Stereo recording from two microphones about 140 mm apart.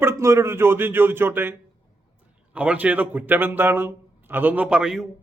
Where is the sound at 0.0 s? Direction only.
20° right (ahead or behind).